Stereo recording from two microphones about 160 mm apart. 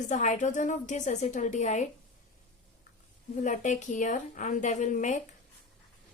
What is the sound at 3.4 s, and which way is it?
A woman's voice, 50° left (ahead or behind).